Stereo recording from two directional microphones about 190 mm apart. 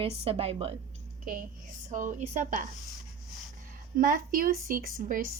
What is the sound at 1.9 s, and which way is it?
Speech, 40° right (ahead or behind).